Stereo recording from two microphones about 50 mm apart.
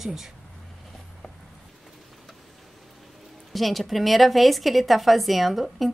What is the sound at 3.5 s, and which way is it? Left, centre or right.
Speech, centre.